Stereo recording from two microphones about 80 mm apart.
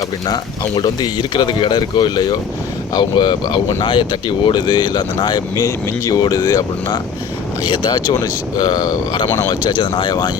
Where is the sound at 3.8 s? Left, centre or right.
Left.